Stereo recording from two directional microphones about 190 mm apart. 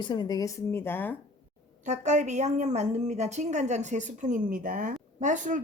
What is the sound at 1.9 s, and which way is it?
A woman's voice, 40° right (ahead or behind).